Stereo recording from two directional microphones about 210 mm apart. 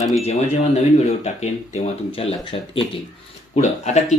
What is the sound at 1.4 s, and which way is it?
Speech, 30° left (ahead or behind).